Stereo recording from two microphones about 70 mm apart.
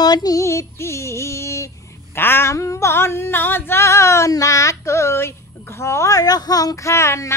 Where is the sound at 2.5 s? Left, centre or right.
Left.